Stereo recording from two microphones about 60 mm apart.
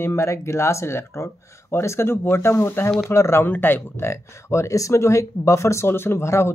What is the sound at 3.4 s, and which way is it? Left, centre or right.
Speech, left.